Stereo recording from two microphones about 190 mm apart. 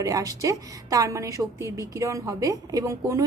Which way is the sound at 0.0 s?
15° right (ahead or behind).